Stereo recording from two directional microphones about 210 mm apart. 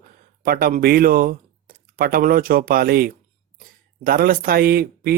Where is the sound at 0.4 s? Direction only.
45° right (ahead or behind).